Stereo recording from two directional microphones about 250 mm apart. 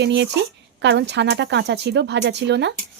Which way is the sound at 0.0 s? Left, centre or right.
Right.